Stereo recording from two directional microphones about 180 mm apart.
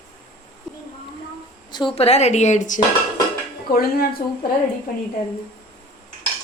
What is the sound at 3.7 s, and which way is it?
Speech, 55° left (ahead or behind).